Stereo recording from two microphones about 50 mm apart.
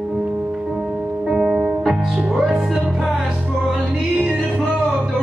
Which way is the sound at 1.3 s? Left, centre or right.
Centre.